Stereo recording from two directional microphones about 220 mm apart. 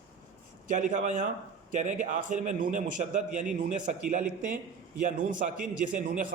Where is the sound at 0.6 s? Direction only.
35° right (ahead or behind).